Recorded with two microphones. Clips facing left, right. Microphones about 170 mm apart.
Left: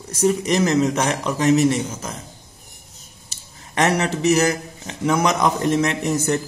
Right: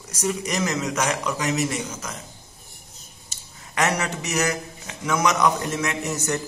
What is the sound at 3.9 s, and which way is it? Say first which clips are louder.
Speech: left 8 dB; 30° left (ahead or behind).